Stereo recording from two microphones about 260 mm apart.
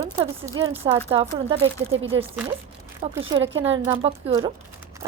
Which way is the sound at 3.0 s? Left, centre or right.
Right.